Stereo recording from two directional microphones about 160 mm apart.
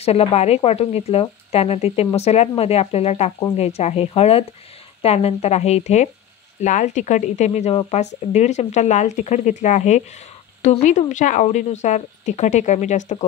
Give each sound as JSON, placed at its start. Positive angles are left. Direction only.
{"t": 0.0, "sound": "speech", "side_deg": 40}